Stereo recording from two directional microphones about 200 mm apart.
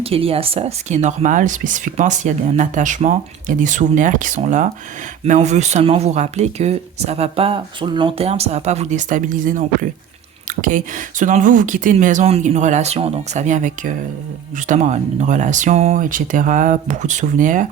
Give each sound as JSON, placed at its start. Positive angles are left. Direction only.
{"t": 0.0, "sound": "speech", "side_deg": -30}